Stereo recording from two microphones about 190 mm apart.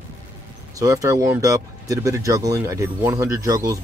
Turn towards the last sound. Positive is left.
turn(degrees=-15)  # may be behind; listen again after turning